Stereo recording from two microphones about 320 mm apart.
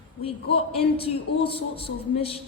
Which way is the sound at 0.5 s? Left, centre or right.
Centre.